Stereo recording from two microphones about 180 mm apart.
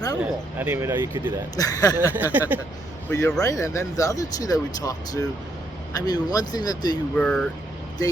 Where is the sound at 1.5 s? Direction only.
20° left (ahead or behind).